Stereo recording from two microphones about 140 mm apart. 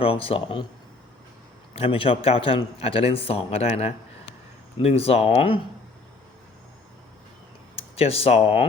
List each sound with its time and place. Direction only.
0.0 s speech: 40° left (ahead or behind)
1.7 s a man's voice: 40° left (ahead or behind)
7.8 s speech: 45° left (ahead or behind)